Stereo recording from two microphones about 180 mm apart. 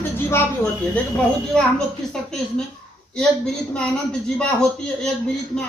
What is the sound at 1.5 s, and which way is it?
Speech, 5° left (ahead or behind).